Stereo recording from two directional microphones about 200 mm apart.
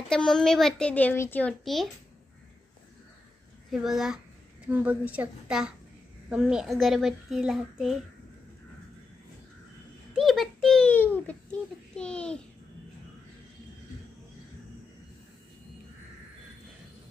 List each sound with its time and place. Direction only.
0.1 s a child's voice: centre (ahead or behind)
3.7 s a child's voice: centre (ahead or behind)
10.1 s a sound: centre (ahead or behind)